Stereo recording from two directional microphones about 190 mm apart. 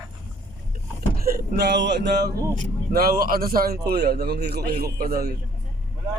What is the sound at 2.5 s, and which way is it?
A man's voice, 45° right (ahead or behind).